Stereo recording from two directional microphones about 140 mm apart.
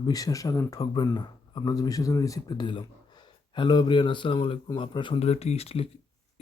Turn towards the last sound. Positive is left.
turn(degrees=45)  # may be behind; listen again after turning